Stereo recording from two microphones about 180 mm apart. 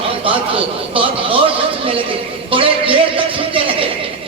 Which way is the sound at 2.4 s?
30° right (ahead or behind).